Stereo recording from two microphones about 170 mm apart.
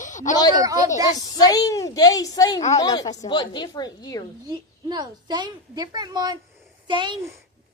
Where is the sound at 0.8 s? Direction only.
20° right (ahead or behind).